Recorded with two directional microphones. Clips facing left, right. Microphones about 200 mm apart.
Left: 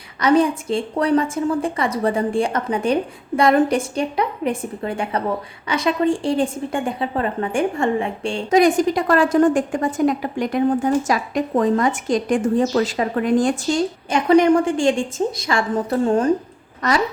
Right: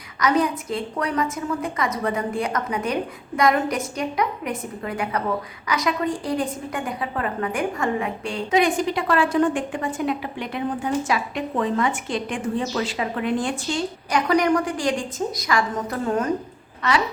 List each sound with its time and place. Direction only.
0.2 s a woman's voice: 30° left (ahead or behind)
8.4 s a woman's voice: 40° left (ahead or behind)
14.1 s a woman's voice: 25° left (ahead or behind)